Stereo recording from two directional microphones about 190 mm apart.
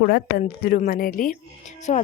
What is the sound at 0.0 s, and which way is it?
A woman's voice, 50° left (ahead or behind).